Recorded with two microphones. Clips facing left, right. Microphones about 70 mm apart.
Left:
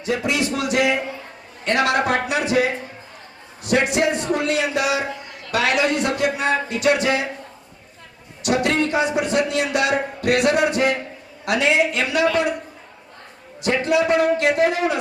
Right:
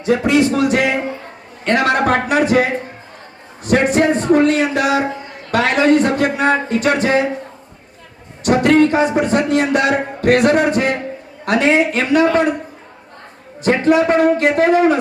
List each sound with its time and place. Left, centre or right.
0.0 s a man's voice: right
8.4 s a man's voice: right
13.6 s a man's voice: right